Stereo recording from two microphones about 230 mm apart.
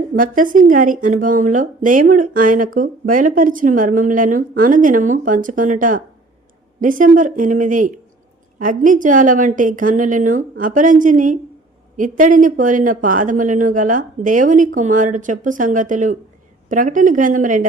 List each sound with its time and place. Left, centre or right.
0.2 s speech: right